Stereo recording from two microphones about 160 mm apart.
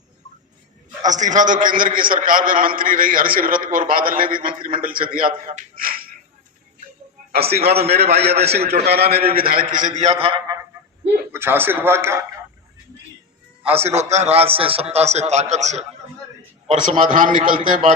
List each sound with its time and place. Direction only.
1.0 s a man's voice: 50° right (ahead or behind)
5.7 s music: 65° right (ahead or behind)
7.5 s a man's voice: 80° right
9.7 s a man's voice: 50° right (ahead or behind)
11.3 s speech: 15° right (ahead or behind)
13.7 s a man's voice: 40° right (ahead or behind)